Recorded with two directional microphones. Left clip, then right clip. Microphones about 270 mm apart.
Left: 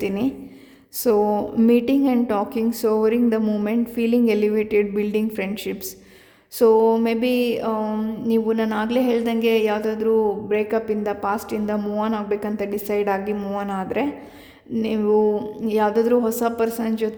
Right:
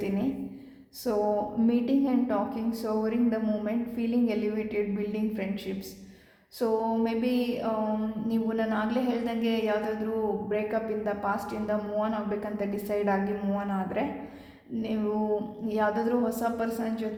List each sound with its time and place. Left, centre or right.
1.0 s a woman's voice: left